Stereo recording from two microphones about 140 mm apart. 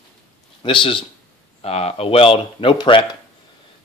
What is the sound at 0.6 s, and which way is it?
Speech, 35° left (ahead or behind).